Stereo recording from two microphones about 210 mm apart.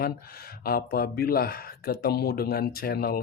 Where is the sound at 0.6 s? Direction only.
45° left (ahead or behind).